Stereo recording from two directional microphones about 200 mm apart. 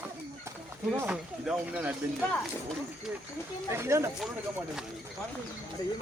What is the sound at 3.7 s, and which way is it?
Speech, 15° right (ahead or behind).